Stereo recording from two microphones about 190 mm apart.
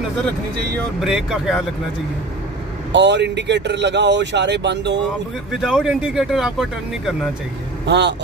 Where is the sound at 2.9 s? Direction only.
65° right (ahead or behind).